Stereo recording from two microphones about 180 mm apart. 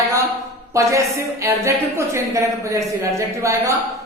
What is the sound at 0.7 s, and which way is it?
A woman's voice, 15° right (ahead or behind).